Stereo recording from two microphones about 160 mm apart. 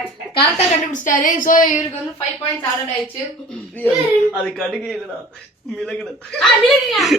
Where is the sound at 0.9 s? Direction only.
55° left (ahead or behind).